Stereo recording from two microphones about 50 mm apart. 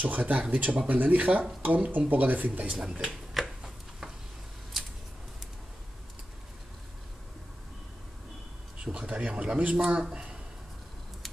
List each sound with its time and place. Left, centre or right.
0.0 s speech: right
3.1 s a sound: centre
8.9 s speech: right
9.8 s speech: centre